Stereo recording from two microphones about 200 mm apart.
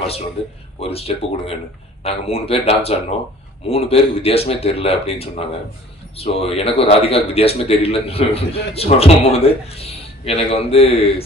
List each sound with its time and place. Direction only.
0.4 s speech: 30° left (ahead or behind)